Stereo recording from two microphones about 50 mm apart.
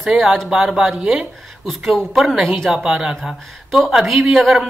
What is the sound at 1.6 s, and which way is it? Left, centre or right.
Speech, centre.